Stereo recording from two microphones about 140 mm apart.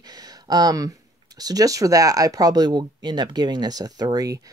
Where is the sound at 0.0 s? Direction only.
30° right (ahead or behind).